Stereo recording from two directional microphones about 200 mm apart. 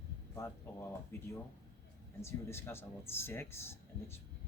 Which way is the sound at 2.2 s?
10° left (ahead or behind).